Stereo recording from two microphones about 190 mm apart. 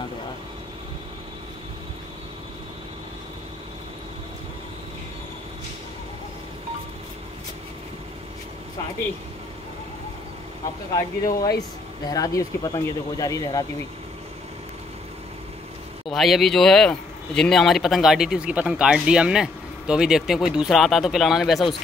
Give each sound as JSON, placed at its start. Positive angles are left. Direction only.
{"t": 11.0, "sound": "speech", "side_deg": 20}
{"t": 16.1, "sound": "speech", "side_deg": 0}